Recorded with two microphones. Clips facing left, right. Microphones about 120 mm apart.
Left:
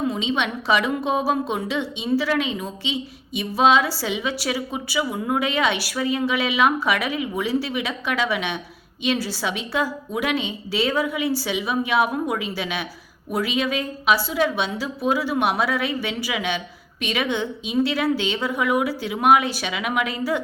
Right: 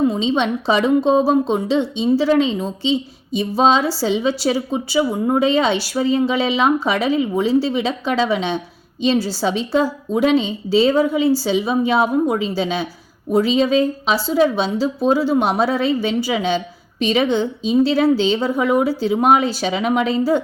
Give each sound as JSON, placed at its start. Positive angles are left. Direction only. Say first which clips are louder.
{"t": 0.1, "sound": "a woman's voice", "louder": "right 6 dB", "side_deg": -30}